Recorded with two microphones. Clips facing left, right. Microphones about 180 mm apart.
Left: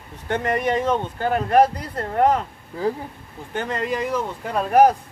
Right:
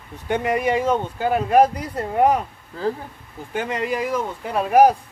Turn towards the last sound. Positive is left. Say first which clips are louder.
# right 1 dB
turn(degrees=-10)  # may be behind; listen again after turning